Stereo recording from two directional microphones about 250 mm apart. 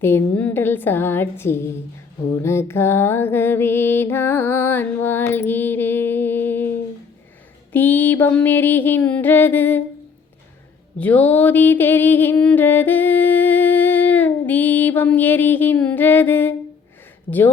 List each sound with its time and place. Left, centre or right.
0.0 s music: centre
7.7 s music: centre
10.9 s a sound: centre
17.3 s music: centre